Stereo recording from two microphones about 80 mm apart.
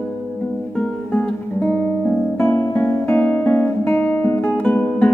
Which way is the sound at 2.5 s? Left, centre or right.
Left.